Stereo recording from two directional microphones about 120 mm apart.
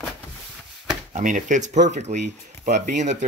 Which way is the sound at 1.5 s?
85° right.